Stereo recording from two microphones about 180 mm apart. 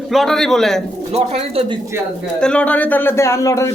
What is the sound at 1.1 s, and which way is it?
Speech, 35° right (ahead or behind).